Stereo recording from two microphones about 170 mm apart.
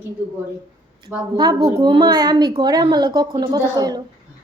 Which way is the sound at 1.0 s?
25° right (ahead or behind).